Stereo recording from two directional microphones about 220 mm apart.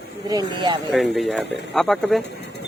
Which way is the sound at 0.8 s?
Centre (ahead or behind).